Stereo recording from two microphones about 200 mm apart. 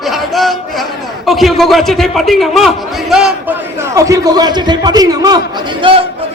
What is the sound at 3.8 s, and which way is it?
A man's voice, 15° right (ahead or behind).